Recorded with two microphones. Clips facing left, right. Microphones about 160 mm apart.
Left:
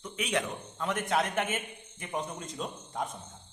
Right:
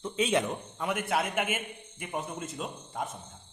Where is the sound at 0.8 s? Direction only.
10° right (ahead or behind).